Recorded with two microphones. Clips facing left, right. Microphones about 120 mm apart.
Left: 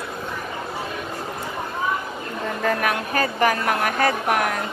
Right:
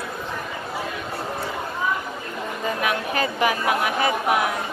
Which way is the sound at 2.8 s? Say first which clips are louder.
Left 1 dB; 45° left (ahead or behind).